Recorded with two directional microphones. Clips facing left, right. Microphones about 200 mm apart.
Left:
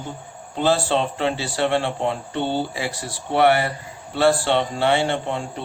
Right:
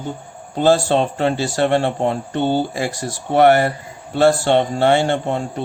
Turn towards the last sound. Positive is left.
turn(degrees=-45)  # may be behind; listen again after turning